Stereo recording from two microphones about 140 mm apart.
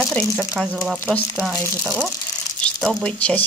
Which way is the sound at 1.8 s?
15° right (ahead or behind).